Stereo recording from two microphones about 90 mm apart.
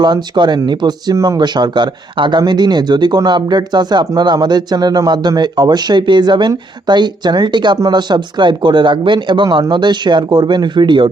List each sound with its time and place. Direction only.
0.0 s speech: 55° right (ahead or behind); by 1.4 s 40° right (ahead or behind)
1.4 s speech: 55° right (ahead or behind)